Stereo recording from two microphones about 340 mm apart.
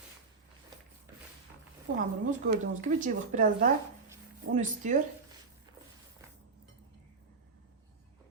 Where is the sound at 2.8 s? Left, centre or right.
Right.